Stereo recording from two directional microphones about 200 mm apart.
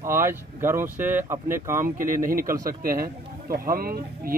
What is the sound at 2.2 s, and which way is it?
A man's voice, 45° right (ahead or behind).